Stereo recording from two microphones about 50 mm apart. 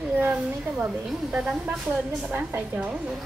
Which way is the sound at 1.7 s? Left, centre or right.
Right.